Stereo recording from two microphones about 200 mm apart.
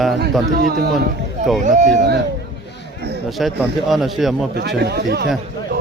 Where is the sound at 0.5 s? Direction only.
55° right (ahead or behind).